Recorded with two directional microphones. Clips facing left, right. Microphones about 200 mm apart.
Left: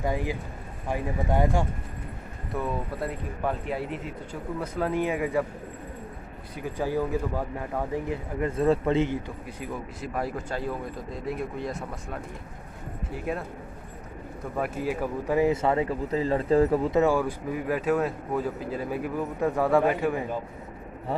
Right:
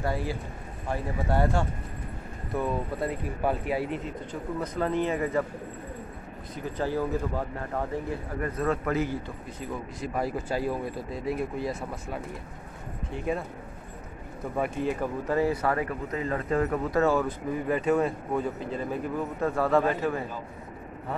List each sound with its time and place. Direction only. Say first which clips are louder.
0.0 s speech: left 1 dB; 15° left (ahead or behind)
2.5 s speech: right 1 dB; centre (ahead or behind)
6.5 s speech: left 1 dB; 10° left (ahead or behind)
9.6 s speech: right 1 dB; centre (ahead or behind)
14.6 s speech: even; 5° left (ahead or behind); by 17.0 s 30° left (ahead or behind)
17.0 s speech: left 1 dB; 10° left (ahead or behind)